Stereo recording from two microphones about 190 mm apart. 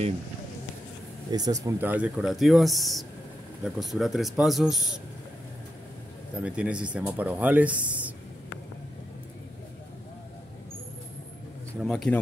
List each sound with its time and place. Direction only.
1.3 s speech: 20° right (ahead or behind); by 4.8 s centre (ahead or behind)
6.3 s speech: 5° right (ahead or behind)
11.8 s speech: centre (ahead or behind)